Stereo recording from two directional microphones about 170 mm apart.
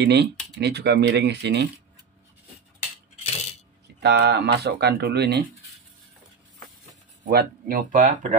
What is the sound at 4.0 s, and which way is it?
Speech, 75° right (ahead or behind).